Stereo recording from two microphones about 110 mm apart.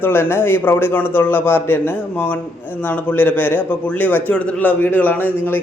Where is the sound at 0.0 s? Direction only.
20° left (ahead or behind).